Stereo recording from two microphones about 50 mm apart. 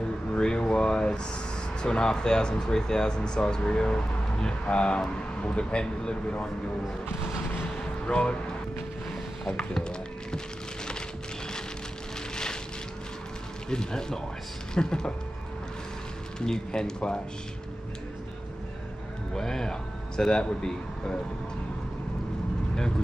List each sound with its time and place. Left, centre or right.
0.0 s a sound: centre
1.8 s speech: centre
8.1 s speech: left
9.8 s music: centre
13.7 s speech: centre
16.3 s speech: centre
19.3 s speech: centre